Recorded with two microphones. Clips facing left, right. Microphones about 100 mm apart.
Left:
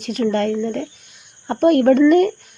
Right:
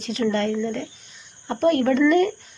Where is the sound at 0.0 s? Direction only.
50° left (ahead or behind).